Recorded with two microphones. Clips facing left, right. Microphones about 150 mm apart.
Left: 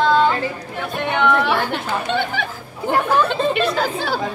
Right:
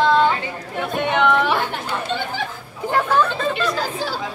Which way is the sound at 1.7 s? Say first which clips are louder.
Left 3 dB; 65° left (ahead or behind).